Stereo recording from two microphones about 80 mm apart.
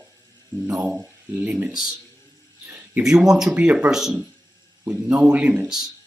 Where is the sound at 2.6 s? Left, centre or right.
Right.